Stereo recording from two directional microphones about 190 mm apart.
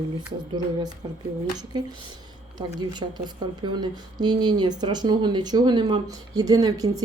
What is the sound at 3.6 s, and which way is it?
Speech, 20° right (ahead or behind).